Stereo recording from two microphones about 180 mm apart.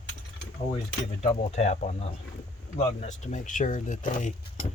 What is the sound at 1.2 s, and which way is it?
Speech, 40° left (ahead or behind).